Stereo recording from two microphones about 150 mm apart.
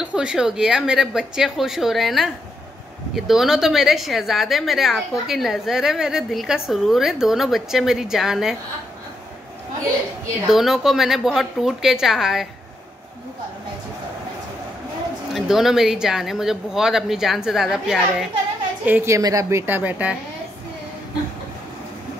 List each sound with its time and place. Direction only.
0.0 s a woman's voice: 5° right (ahead or behind)
10.5 s a woman's voice: 5° right (ahead or behind)
15.3 s a woman's voice: centre (ahead or behind)
18.9 s a woman's voice: 15° right (ahead or behind)
19.6 s speech: 10° right (ahead or behind)